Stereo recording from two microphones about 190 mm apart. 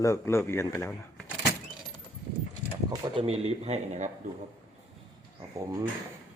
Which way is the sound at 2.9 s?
30° right (ahead or behind).